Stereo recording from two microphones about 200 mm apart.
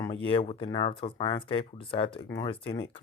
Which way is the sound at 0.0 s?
25° left (ahead or behind).